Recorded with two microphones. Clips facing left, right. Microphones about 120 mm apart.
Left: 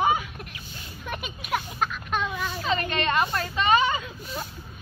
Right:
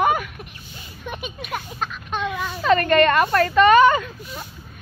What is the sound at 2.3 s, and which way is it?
A woman's voice, 55° right (ahead or behind).